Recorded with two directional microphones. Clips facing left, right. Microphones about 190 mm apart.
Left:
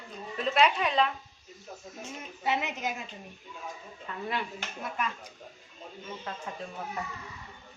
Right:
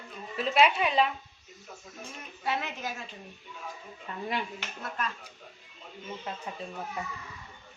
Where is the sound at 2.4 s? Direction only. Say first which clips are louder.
Left 2 dB; 20° left (ahead or behind).